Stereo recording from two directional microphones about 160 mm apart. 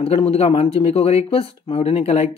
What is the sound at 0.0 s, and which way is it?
Speech, 35° left (ahead or behind).